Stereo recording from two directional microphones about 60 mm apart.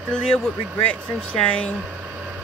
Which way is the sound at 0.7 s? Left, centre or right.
Left.